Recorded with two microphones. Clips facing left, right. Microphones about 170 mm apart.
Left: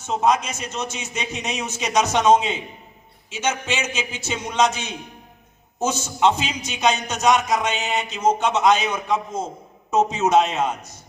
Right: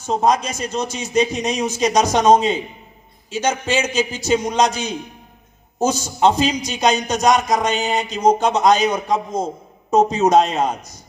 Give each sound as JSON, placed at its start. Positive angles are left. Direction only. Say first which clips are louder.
{"t": 0.0, "sound": "a man's voice", "louder": "right 3 dB", "side_deg": -35}